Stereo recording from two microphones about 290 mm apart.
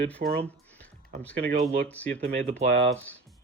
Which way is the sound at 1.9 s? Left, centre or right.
Centre.